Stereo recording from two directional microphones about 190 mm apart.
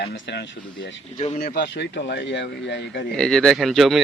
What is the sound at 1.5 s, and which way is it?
Speech, 60° left (ahead or behind).